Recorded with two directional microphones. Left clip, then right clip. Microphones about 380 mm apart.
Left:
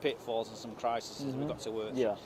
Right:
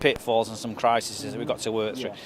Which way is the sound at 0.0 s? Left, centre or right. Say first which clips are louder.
Right 11 dB; centre.